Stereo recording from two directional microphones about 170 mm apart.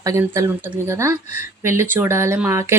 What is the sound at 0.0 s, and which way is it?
Speech, 20° right (ahead or behind).